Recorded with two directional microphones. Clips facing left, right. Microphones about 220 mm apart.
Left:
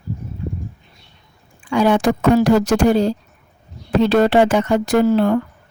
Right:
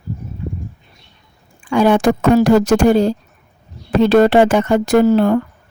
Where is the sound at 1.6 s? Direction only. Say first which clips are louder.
Right 3 dB; 50° right (ahead or behind).